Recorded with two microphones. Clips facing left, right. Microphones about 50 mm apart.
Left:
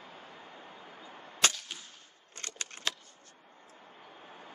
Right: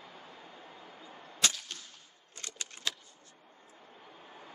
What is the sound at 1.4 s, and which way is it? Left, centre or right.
Whip, left.